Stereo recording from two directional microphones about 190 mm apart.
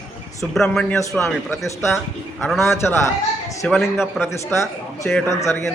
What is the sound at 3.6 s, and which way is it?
Speech, centre (ahead or behind).